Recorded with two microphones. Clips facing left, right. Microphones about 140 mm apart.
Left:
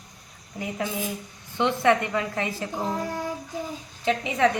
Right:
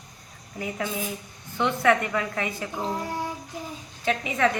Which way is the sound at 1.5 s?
25° left (ahead or behind).